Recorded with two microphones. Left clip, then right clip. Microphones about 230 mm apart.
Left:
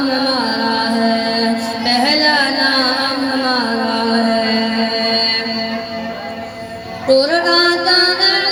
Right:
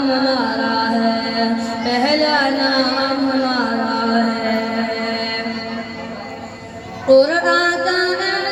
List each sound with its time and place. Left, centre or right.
0.1 s music: left
7.1 s music: left